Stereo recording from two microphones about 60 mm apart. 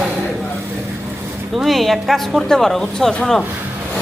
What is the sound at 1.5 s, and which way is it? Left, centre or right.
A woman's voice, centre.